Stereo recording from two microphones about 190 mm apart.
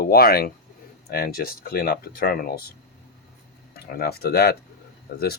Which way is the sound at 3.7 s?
55° left (ahead or behind).